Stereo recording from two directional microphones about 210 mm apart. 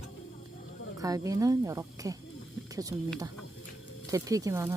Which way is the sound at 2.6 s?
15° right (ahead or behind).